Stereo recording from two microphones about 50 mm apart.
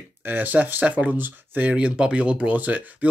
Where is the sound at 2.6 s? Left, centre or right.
Right.